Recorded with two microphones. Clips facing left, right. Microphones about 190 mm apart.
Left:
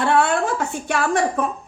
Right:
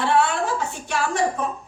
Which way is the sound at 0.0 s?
55° left (ahead or behind).